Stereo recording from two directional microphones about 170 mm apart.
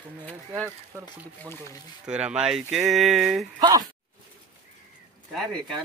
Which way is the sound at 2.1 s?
5° right (ahead or behind).